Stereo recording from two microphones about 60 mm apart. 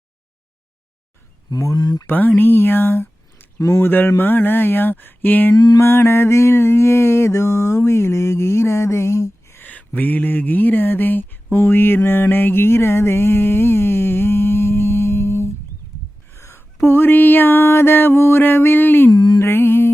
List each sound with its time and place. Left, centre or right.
1.5 s speech: left
2.0 s speech: left
3.7 s mantra: left
9.6 s speech: left
11.5 s a sound: left
17.9 s mantra: left